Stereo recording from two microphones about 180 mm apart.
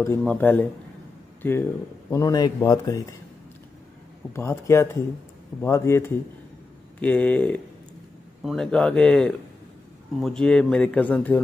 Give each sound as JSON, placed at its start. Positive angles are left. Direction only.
{"t": 0.2, "sound": "speech", "side_deg": 10}
{"t": 4.3, "sound": "speech", "side_deg": 15}